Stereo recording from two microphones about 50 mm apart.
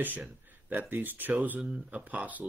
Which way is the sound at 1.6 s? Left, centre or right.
Right.